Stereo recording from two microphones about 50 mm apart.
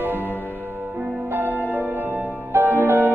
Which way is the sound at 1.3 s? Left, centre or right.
Right.